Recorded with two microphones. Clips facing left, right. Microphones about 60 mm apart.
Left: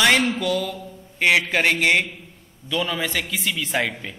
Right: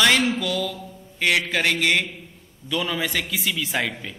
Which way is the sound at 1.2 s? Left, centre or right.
Left.